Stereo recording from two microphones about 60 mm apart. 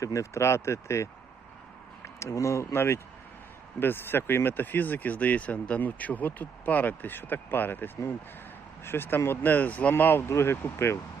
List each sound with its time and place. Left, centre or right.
0.0 s speech: left
2.1 s speech: left
2.7 s speech: left
10.0 s speech: left